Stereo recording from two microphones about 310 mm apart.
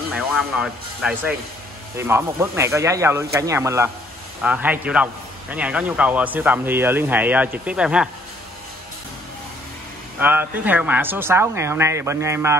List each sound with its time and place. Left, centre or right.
0.1 s a man's voice: centre
10.1 s speech: centre